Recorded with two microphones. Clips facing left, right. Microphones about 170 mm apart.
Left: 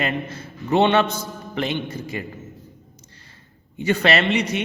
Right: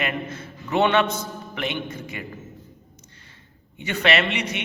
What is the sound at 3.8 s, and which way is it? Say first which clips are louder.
Speech: left 3 dB; 35° left (ahead or behind).